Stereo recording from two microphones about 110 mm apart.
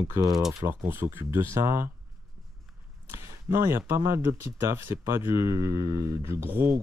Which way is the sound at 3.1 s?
25° right (ahead or behind).